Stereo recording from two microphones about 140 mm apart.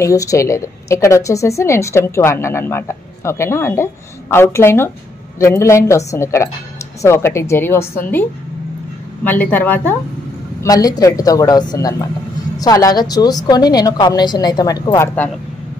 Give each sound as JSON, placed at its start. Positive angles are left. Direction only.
{"t": 0.0, "sound": "a woman's voice", "side_deg": 25}
{"t": 10.6, "sound": "a woman's voice", "side_deg": 25}